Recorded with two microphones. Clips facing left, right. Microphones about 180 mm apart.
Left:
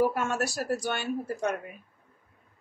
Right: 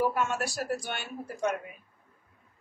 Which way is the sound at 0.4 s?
45° left (ahead or behind).